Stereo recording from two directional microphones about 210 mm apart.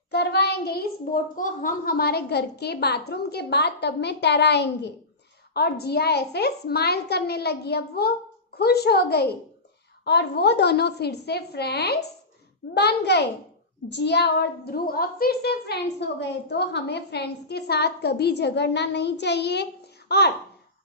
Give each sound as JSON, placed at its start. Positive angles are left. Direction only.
{"t": 0.1, "sound": "a woman's voice", "side_deg": 50}